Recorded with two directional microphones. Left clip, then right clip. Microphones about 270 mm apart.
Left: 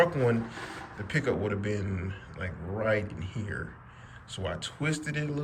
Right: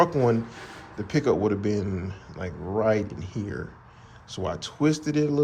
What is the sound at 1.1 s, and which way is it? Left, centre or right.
Speech, centre.